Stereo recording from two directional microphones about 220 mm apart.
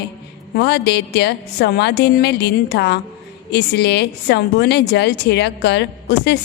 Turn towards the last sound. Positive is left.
turn(degrees=50)  # may be behind; listen again after turning